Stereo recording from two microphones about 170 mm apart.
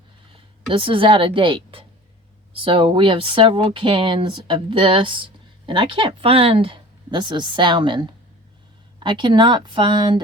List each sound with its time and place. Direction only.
0.7 s a woman's voice: 30° right (ahead or behind)